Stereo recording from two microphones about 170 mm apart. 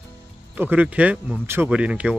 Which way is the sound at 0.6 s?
10° right (ahead or behind).